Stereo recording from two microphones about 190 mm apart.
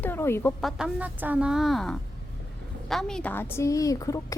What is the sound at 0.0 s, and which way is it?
Speech, 10° left (ahead or behind).